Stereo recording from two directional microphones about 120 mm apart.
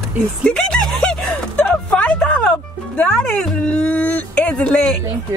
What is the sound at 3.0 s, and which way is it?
Speech, 5° left (ahead or behind).